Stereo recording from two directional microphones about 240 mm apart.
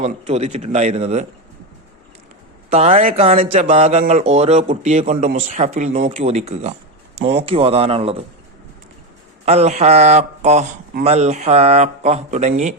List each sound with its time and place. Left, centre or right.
0.0 s a man's voice: right
2.6 s a man's voice: right
9.5 s a man's voice: right